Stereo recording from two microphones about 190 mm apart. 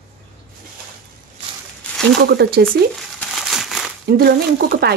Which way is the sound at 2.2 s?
55° right (ahead or behind).